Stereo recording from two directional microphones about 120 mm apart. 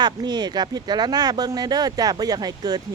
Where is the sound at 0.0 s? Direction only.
35° right (ahead or behind).